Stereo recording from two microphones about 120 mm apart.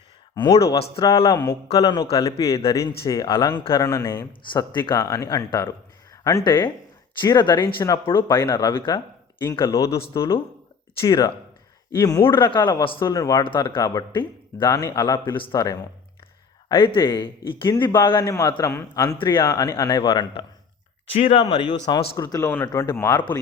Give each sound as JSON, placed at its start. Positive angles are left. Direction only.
{"t": 0.3, "sound": "a man's voice", "side_deg": 30}
{"t": 3.8, "sound": "a man's voice", "side_deg": 25}
{"t": 4.3, "sound": "a man's voice", "side_deg": 40}
{"t": 9.6, "sound": "a man's voice", "side_deg": 25}
{"t": 11.0, "sound": "a man's voice", "side_deg": 30}
{"t": 12.3, "sound": "a man's voice", "side_deg": 40}
{"t": 13.1, "sound": "a man's voice", "side_deg": 30}
{"t": 13.4, "sound": "a man's voice", "side_deg": 45}
{"t": 13.7, "sound": "a man's voice", "side_deg": 30}
{"t": 15.5, "sound": "a man's voice", "side_deg": 30}
{"t": 16.6, "sound": "a man's voice", "side_deg": 45}
{"t": 21.1, "sound": "a man's voice", "side_deg": 50}
{"t": 22.4, "sound": "a man's voice", "side_deg": 20}